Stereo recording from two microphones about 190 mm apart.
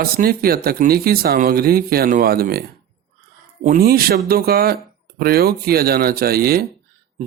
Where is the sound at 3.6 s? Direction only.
50° right (ahead or behind).